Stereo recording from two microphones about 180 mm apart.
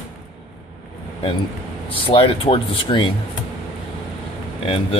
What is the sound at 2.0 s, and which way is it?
Speech, 30° left (ahead or behind).